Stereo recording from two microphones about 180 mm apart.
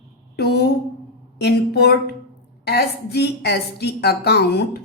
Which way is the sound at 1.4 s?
65° left (ahead or behind).